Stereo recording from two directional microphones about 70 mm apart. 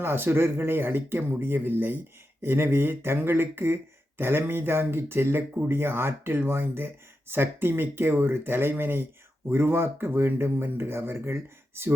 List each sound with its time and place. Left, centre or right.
0.0 s speech: right